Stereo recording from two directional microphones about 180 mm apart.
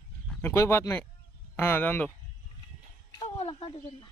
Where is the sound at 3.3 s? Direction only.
35° left (ahead or behind).